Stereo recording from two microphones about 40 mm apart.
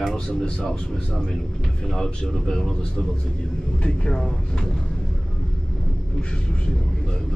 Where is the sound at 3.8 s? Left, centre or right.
Left.